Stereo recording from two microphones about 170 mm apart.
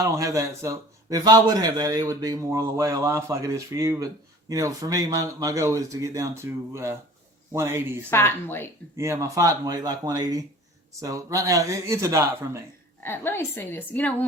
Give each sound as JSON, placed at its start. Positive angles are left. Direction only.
{"t": 0.0, "sound": "a man's voice", "side_deg": -20}
{"t": 8.1, "sound": "a woman's voice", "side_deg": 15}
{"t": 9.0, "sound": "a man's voice", "side_deg": -20}
{"t": 13.0, "sound": "a woman's voice", "side_deg": 15}